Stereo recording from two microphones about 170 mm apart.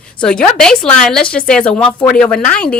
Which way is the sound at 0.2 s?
5° left (ahead or behind).